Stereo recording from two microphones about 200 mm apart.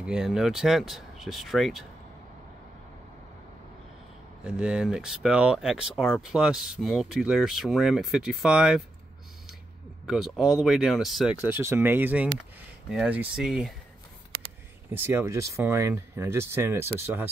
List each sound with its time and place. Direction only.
0.0 s speech: 5° right (ahead or behind)
4.5 s speech: 5° right (ahead or behind)
10.0 s speech: centre (ahead or behind)
11.4 s speech: 10° right (ahead or behind)
14.9 s speech: 10° right (ahead or behind)